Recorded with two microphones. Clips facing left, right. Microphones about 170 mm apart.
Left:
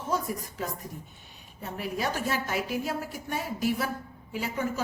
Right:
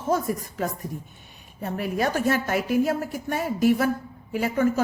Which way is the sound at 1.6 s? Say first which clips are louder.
Right 6 dB; 55° right (ahead or behind).